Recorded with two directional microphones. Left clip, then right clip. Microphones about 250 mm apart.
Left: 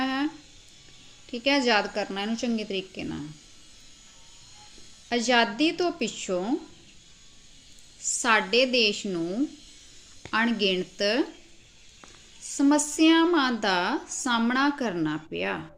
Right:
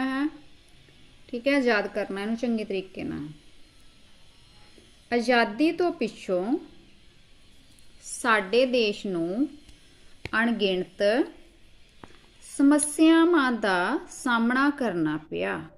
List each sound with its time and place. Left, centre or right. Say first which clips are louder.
0.0 s a sound: left 1 dB; centre
1.3 s a woman's voice: even; centre
5.0 s a woman's voice: even; centre
8.2 s a woman's voice: even; centre
12.5 s a woman's voice: right 1 dB; centre